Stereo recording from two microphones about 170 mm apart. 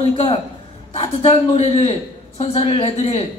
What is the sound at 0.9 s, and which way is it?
Speech, 35° left (ahead or behind).